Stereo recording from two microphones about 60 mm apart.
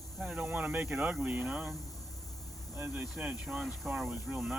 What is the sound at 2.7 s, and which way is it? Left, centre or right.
Insect, right.